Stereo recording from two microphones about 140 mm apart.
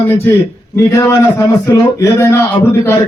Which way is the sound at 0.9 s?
25° left (ahead or behind).